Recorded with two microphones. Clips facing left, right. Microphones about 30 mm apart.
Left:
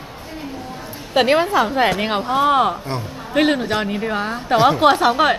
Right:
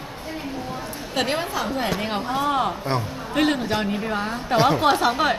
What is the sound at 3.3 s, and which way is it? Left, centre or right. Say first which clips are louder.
A woman's voice: left 4 dB; centre.